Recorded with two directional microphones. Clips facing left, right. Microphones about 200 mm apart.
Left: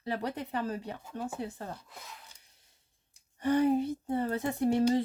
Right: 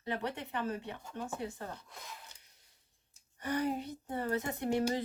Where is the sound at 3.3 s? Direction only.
25° left (ahead or behind).